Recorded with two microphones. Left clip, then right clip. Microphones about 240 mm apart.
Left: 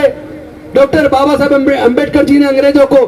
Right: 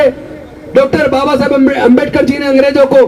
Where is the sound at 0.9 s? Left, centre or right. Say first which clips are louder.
Left 1 dB; left.